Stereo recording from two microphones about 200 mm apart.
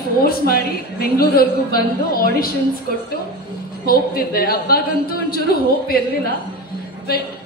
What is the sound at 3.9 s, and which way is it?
A woman's voice, 50° left (ahead or behind).